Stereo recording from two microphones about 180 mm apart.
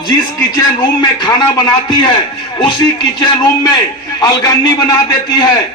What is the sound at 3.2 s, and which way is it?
A man's voice, 20° left (ahead or behind).